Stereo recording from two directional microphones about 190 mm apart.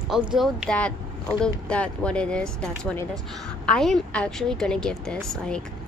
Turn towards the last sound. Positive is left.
turn(degrees=5)  # may be behind; listen again after turning